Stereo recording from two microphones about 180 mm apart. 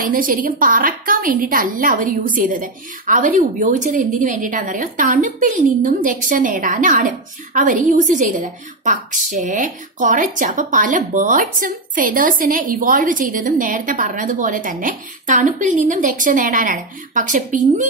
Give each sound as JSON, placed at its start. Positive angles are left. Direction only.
{"t": 0.0, "sound": "a woman's voice", "side_deg": -50}